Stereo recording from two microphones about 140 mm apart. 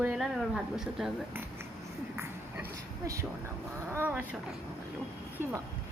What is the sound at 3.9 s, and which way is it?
Speech, 15° right (ahead or behind).